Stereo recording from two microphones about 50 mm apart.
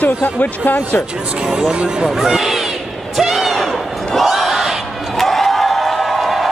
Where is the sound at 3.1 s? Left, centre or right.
Centre.